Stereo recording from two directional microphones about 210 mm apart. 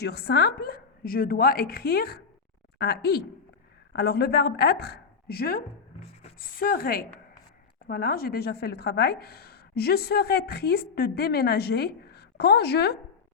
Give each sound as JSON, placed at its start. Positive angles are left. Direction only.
{"t": 0.0, "sound": "a woman's voice", "side_deg": 50}